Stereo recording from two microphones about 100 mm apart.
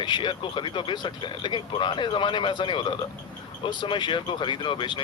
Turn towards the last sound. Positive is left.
turn(degrees=55)  # may be behind; listen again after turning